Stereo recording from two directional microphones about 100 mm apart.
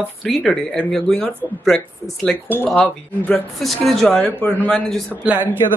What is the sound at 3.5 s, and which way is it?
Speech, centre (ahead or behind).